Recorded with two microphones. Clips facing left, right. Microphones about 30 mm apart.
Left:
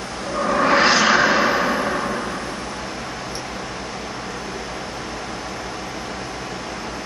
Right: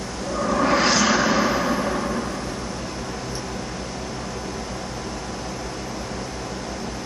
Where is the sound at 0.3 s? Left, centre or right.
Left.